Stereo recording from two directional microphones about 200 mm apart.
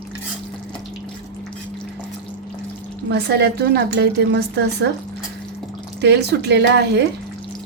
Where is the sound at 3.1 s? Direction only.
55° right (ahead or behind).